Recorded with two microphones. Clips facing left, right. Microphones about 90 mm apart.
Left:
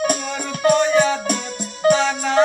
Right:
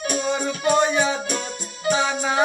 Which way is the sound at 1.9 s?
15° right (ahead or behind).